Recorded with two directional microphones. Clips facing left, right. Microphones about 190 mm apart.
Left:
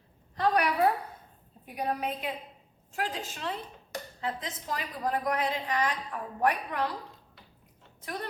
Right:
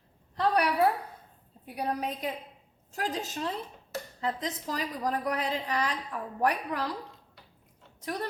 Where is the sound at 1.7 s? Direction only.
40° right (ahead or behind).